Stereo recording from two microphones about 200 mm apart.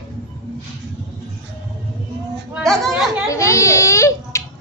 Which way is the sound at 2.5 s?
Centre (ahead or behind).